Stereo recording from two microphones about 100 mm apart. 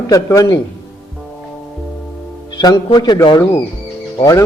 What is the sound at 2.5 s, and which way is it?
Speech, 45° left (ahead or behind).